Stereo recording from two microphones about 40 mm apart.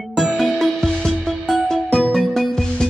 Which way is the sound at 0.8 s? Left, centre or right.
Centre.